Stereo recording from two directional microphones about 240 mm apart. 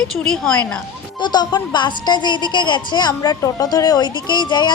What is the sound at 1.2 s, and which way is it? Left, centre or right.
A woman's voice, centre.